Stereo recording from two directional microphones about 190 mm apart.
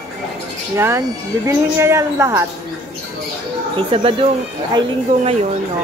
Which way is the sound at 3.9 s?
30° right (ahead or behind).